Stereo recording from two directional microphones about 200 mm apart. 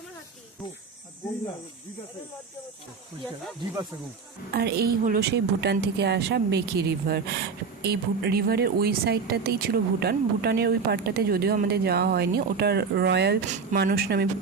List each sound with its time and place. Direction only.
4.5 s a woman's voice: 50° right (ahead or behind)